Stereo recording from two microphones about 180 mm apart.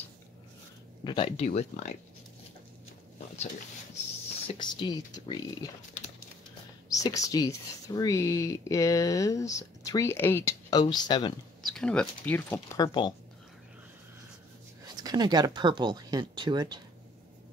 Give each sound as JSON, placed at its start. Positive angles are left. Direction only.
{"t": 1.0, "sound": "speech", "side_deg": 30}
{"t": 4.5, "sound": "speech", "side_deg": 25}
{"t": 6.9, "sound": "speech", "side_deg": 20}
{"t": 11.6, "sound": "speech", "side_deg": 5}
{"t": 12.8, "sound": "speech", "side_deg": 25}
{"t": 15.0, "sound": "speech", "side_deg": -25}